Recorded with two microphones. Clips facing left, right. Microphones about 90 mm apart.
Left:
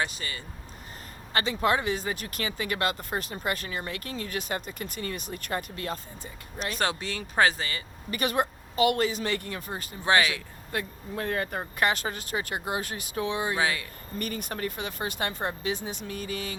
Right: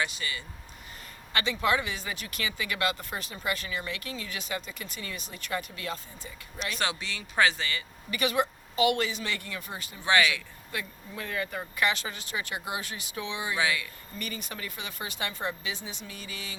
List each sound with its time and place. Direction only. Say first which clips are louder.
0.0 s speech: left 1 dB; 40° left (ahead or behind)